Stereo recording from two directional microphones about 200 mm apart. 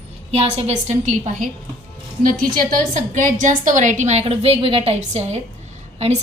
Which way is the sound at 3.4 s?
40° right (ahead or behind).